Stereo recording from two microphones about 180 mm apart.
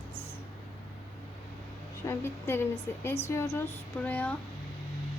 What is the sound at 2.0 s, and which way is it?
A woman's voice, 15° left (ahead or behind).